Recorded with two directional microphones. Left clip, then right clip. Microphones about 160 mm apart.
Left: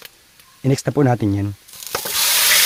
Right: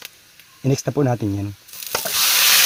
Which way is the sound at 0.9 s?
40° left (ahead or behind).